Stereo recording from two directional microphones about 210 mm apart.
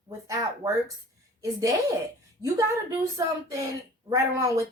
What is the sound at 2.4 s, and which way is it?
A woman's voice, 15° right (ahead or behind).